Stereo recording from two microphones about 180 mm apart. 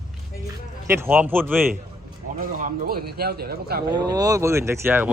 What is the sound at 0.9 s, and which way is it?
Speech, 10° right (ahead or behind).